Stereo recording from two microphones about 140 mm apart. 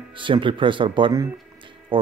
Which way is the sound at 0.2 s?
35° right (ahead or behind).